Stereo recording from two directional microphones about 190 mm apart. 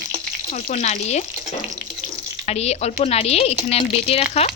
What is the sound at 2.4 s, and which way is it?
Speech, 35° left (ahead or behind).